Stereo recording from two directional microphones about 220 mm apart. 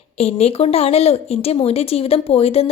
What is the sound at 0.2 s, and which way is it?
Speech, 30° left (ahead or behind).